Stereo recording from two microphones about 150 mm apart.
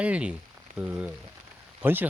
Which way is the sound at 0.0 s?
10° right (ahead or behind).